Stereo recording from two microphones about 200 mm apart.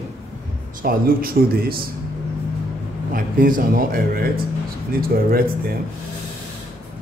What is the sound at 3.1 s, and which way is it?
A man's voice, 45° right (ahead or behind).